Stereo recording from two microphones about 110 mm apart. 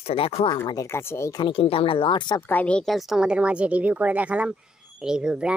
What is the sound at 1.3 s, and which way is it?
Speech, 45° left (ahead or behind).